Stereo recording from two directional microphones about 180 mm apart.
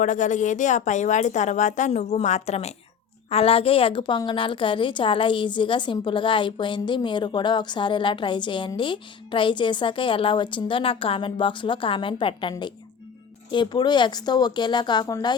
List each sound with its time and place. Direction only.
0.0 s a woman's voice: 45° left (ahead or behind); by 15.4 s 20° left (ahead or behind)